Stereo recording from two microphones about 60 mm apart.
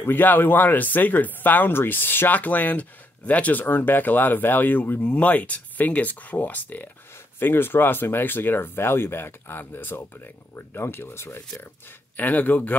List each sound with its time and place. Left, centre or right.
0.0 s speech: left
5.1 s speech: left
7.3 s speech: left
12.2 s speech: left